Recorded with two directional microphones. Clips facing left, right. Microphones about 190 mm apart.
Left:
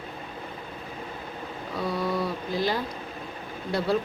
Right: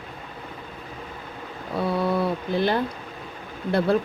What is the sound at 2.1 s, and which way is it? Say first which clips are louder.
Speech: right 4 dB; 60° right (ahead or behind).